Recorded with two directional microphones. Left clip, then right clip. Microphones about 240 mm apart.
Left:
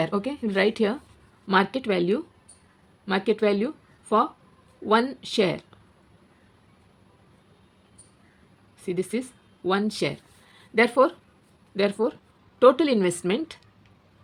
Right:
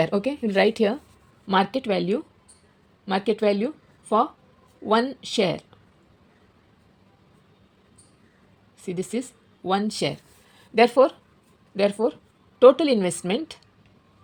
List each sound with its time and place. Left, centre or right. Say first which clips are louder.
0.0 s a woman's voice: right 3 dB; centre
8.8 s a woman's voice: left 1 dB; centre